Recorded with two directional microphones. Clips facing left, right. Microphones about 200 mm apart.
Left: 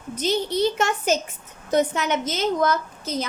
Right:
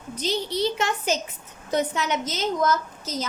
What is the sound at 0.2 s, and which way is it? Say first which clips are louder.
A woman's voice: left 3 dB; 50° left (ahead or behind).